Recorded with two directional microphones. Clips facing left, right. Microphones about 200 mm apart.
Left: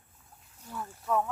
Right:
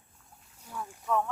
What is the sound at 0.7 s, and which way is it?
Boat, 10° right (ahead or behind).